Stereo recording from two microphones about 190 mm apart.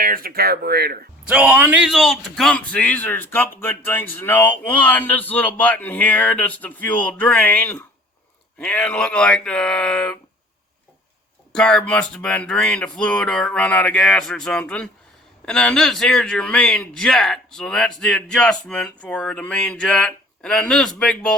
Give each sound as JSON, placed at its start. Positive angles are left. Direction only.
{"t": 0.0, "sound": "speech", "side_deg": -50}
{"t": 1.3, "sound": "a man's voice", "side_deg": -5}
{"t": 11.5, "sound": "a man's voice", "side_deg": 5}